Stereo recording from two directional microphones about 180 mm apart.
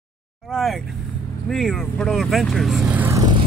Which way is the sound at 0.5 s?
Centre (ahead or behind).